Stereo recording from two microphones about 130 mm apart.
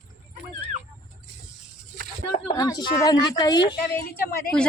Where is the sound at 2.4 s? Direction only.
30° left (ahead or behind).